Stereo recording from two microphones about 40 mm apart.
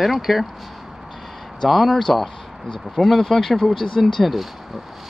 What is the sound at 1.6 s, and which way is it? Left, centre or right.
Speech, centre.